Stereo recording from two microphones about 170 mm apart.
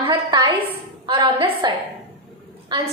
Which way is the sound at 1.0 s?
25° right (ahead or behind).